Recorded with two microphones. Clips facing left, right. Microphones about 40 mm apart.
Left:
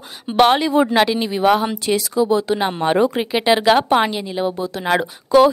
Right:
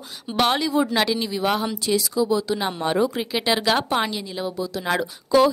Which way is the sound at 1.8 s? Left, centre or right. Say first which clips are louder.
Left 2 dB; left.